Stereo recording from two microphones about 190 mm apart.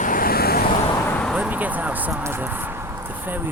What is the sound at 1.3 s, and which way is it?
Speech, 10° right (ahead or behind).